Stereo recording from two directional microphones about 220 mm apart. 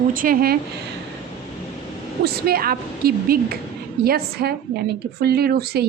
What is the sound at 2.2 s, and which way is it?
Speech, 45° right (ahead or behind).